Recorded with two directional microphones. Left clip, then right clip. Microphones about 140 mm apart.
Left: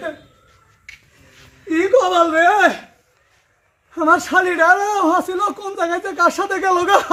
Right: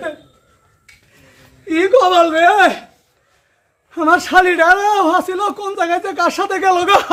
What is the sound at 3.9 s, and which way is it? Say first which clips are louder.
A man's voice: right 2 dB; 35° right (ahead or behind).